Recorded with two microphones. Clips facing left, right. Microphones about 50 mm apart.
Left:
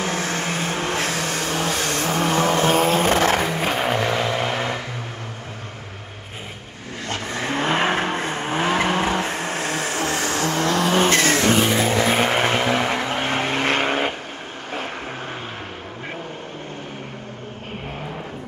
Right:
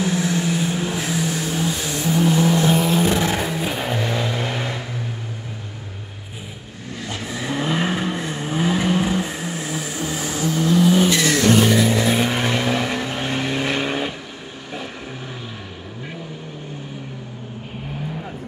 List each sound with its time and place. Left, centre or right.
0.0 s vehicle: left
7.1 s vehicle: left
11.1 s vehicle: left